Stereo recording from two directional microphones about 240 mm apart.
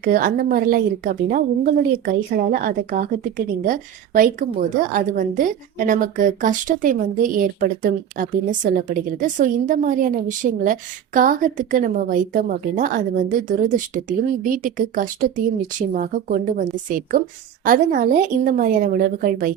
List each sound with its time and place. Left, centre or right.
0.0 s a woman's voice: right